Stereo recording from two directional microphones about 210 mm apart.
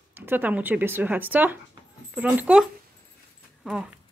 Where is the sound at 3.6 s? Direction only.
5° right (ahead or behind).